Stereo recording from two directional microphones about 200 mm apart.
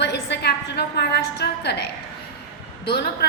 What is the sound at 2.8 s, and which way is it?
Speech, 50° left (ahead or behind).